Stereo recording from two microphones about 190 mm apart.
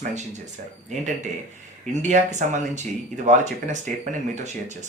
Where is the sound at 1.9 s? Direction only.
40° right (ahead or behind).